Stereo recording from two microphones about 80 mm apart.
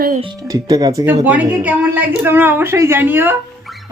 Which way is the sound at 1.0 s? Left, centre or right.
Centre.